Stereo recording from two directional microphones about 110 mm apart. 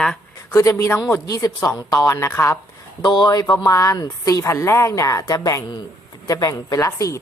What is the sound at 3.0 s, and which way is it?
Speech, 40° left (ahead or behind).